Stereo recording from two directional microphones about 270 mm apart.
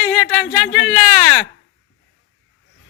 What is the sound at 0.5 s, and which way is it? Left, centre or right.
Speech, left.